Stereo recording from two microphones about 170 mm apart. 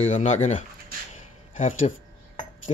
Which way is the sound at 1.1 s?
45° left (ahead or behind).